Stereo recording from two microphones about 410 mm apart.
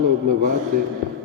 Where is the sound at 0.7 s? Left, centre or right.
Right.